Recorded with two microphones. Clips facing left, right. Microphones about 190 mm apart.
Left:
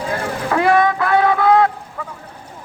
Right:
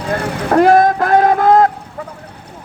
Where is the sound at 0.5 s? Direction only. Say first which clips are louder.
Right 6 dB; 40° right (ahead or behind).